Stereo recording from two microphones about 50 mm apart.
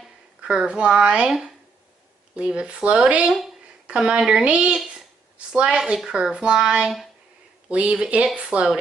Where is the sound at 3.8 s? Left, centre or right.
Right.